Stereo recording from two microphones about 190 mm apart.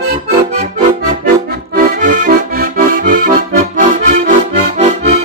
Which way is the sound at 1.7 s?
45° right (ahead or behind).